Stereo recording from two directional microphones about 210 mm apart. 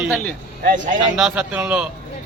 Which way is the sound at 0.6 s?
40° right (ahead or behind).